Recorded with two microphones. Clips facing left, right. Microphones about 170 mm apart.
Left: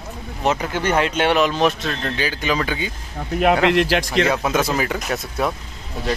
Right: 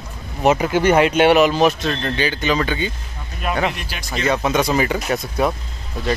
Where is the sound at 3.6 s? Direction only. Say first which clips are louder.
Left 8 dB; 90° left.